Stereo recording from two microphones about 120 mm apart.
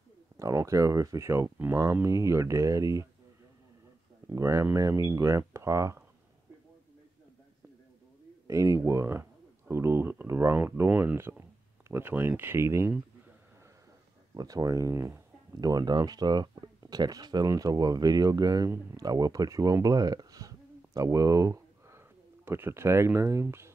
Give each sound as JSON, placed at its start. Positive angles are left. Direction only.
{"t": 0.4, "sound": "speech", "side_deg": -25}
{"t": 4.3, "sound": "speech", "side_deg": -25}
{"t": 8.5, "sound": "speech", "side_deg": -25}
{"t": 14.3, "sound": "speech", "side_deg": -30}